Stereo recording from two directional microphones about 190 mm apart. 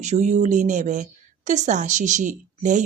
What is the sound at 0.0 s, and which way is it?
A woman's voice, 35° right (ahead or behind).